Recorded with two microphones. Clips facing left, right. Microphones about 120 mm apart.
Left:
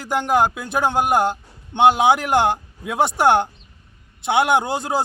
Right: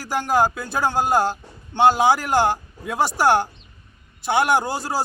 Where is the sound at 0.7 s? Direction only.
20° left (ahead or behind).